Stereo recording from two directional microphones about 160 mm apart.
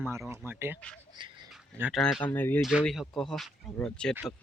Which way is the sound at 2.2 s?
10° left (ahead or behind).